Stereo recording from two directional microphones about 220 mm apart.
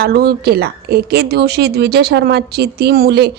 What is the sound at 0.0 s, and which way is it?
Speech, 45° right (ahead or behind).